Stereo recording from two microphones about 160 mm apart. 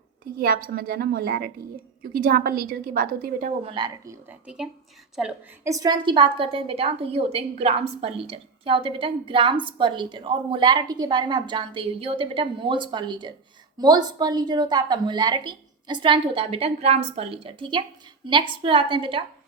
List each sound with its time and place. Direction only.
0.3 s a woman's voice: 65° right (ahead or behind)
3.6 s a woman's voice: 30° right (ahead or behind); by 5.3 s 5° right (ahead or behind)
5.6 s a woman's voice: 20° right (ahead or behind)